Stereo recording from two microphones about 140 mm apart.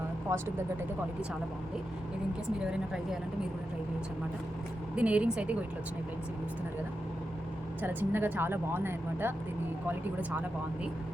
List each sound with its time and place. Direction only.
0.3 s speech: 25° right (ahead or behind)
2.6 s speech: 5° right (ahead or behind)
4.9 s speech: 10° right (ahead or behind)
7.8 s speech: 15° right (ahead or behind)